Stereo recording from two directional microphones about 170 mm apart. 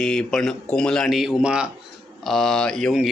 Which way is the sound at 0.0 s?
5° left (ahead or behind).